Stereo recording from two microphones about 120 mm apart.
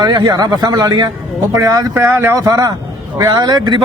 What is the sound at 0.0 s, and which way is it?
Speech, 35° right (ahead or behind).